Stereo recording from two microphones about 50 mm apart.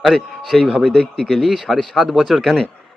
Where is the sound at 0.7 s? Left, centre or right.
Centre.